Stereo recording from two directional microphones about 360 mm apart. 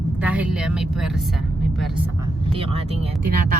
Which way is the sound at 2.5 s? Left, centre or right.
Centre.